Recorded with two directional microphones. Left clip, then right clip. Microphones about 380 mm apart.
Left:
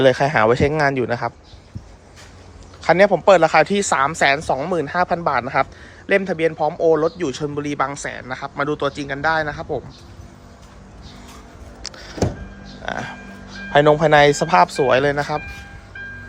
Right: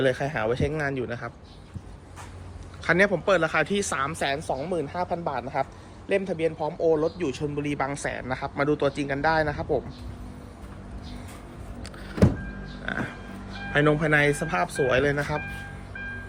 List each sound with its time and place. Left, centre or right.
0.0 s a man's voice: centre
2.8 s a man's voice: centre
11.8 s power windows: centre
12.8 s a man's voice: centre